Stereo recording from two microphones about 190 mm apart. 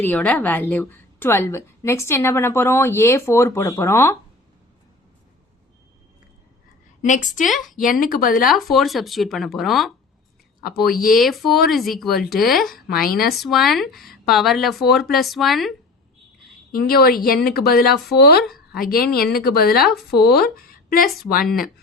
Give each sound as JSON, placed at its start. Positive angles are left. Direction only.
{"t": 0.0, "sound": "a woman's voice", "side_deg": 10}
{"t": 7.0, "sound": "a woman's voice", "side_deg": 40}
{"t": 7.4, "sound": "speech", "side_deg": 0}
{"t": 7.8, "sound": "speech", "side_deg": 45}
{"t": 8.7, "sound": "speech", "side_deg": 0}
{"t": 10.6, "sound": "speech", "side_deg": 50}
{"t": 11.2, "sound": "speech", "side_deg": 0}
{"t": 12.9, "sound": "speech", "side_deg": 50}
{"t": 13.4, "sound": "speech", "side_deg": 0}
{"t": 16.7, "sound": "speech", "side_deg": 50}